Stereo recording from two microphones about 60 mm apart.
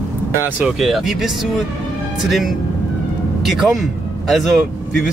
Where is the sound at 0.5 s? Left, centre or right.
Centre.